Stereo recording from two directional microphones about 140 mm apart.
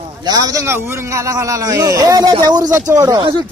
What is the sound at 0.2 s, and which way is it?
A man's voice, 25° right (ahead or behind).